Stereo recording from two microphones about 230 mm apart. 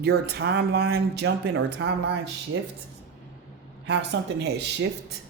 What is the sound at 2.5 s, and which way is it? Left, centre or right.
Speech, right.